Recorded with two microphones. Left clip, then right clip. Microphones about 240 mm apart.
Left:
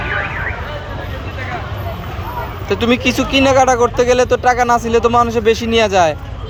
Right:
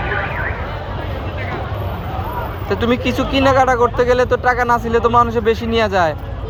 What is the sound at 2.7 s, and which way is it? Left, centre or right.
Speech, centre.